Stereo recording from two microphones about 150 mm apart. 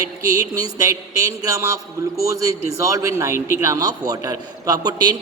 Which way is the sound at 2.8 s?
20° right (ahead or behind).